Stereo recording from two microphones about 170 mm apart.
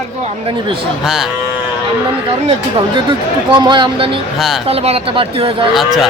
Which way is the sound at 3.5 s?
25° right (ahead or behind).